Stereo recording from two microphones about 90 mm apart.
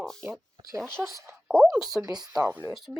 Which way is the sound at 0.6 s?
40° right (ahead or behind).